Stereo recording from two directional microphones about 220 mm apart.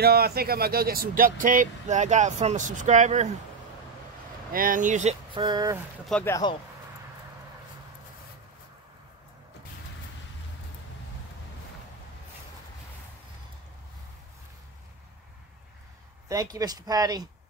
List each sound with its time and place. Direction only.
0.0 s speech: 45° right (ahead or behind)
4.5 s speech: 40° right (ahead or behind)
5.4 s speech: 20° right (ahead or behind)
6.0 s speech: 5° left (ahead or behind)
6.3 s speech: 20° left (ahead or behind)
16.3 s speech: 15° right (ahead or behind)